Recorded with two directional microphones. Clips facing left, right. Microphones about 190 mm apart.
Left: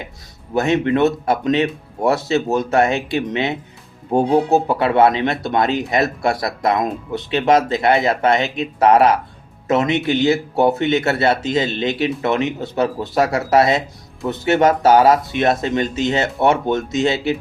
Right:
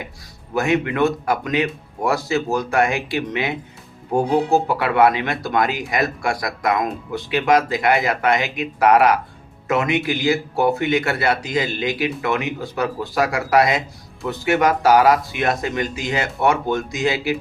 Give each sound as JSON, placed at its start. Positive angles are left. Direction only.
{"t": 0.5, "sound": "speech", "side_deg": 25}